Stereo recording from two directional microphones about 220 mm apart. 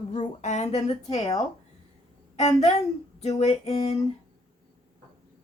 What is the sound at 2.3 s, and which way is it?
A woman's voice, 30° left (ahead or behind).